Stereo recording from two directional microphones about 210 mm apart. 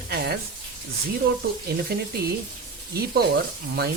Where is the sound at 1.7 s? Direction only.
50° right (ahead or behind).